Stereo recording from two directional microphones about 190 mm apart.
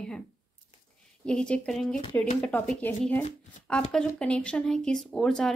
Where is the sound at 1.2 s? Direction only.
5° left (ahead or behind).